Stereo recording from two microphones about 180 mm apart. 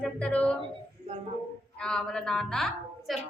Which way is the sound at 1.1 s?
35° right (ahead or behind).